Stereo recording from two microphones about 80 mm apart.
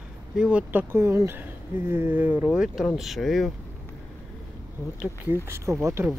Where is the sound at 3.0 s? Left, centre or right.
Centre.